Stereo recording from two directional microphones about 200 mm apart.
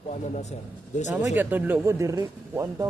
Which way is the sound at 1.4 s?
10° right (ahead or behind).